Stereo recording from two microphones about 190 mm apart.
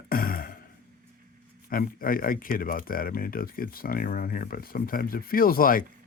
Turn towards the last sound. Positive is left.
turn(degrees=50)  # may be behind; listen again after turning